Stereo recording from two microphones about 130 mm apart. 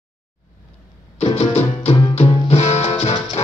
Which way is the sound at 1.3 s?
55° left (ahead or behind).